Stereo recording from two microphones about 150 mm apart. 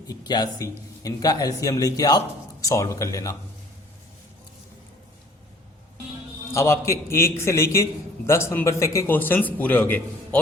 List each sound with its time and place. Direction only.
0.1 s a man's voice: 30° left (ahead or behind)
6.5 s a man's voice: 20° left (ahead or behind)